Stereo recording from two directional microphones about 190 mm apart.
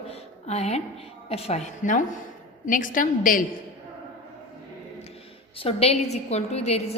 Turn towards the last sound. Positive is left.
turn(degrees=35)  # may be behind; listen again after turning